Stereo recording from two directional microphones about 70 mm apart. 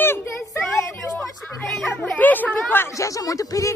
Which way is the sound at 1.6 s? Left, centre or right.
Centre.